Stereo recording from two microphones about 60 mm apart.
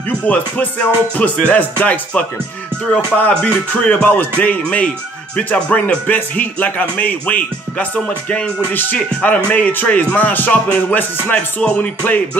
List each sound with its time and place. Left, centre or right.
0.3 s speech: left